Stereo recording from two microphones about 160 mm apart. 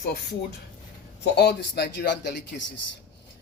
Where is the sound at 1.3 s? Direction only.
90° left.